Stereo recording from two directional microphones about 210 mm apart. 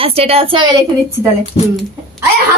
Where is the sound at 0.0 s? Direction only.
30° right (ahead or behind).